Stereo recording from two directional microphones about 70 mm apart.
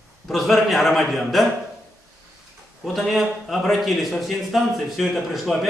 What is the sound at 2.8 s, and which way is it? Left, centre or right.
Speech, centre.